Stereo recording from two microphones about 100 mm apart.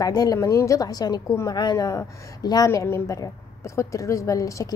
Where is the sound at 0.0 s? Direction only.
40° left (ahead or behind).